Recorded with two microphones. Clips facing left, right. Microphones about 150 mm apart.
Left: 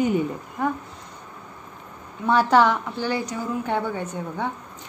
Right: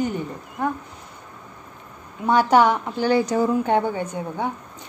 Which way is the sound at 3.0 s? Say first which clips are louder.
Right 7 dB; 60° right (ahead or behind).